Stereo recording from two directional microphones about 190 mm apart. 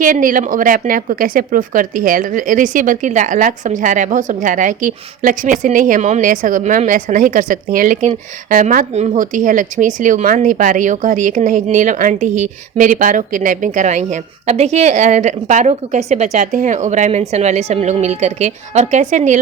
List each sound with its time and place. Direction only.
0.0 s speech: 45° right (ahead or behind)